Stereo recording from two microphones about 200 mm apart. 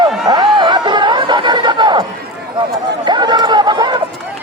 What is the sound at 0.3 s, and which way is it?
Chatter, 20° right (ahead or behind).